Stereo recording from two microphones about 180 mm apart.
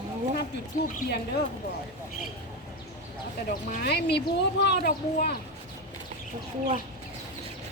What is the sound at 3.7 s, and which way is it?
Speech, 60° left (ahead or behind).